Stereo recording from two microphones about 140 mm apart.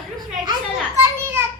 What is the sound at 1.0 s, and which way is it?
Speech, 15° right (ahead or behind).